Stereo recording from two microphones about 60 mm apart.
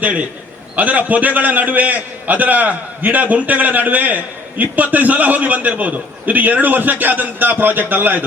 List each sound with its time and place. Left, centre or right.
0.0 s a man's voice: right